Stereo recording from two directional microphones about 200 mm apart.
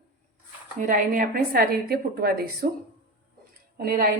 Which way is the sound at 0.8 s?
40° right (ahead or behind).